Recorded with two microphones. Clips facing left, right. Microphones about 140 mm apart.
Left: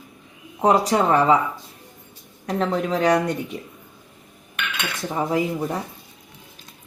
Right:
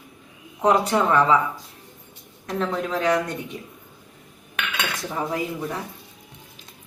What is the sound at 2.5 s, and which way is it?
Speech, 35° left (ahead or behind).